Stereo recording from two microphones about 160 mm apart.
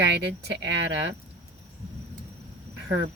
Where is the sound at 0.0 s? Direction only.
90° right.